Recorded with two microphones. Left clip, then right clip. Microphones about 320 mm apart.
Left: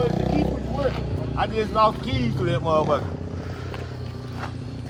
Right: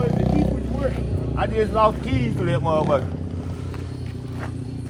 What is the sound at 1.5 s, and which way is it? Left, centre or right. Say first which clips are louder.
Speech: right 2 dB; right.